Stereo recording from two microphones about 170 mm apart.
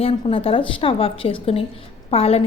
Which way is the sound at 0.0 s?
35° left (ahead or behind).